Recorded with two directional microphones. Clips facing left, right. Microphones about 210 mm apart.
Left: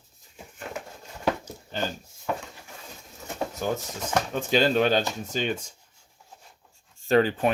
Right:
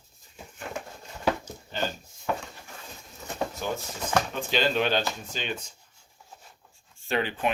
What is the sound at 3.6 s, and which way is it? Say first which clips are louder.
Speech: left 3 dB; 45° left (ahead or behind).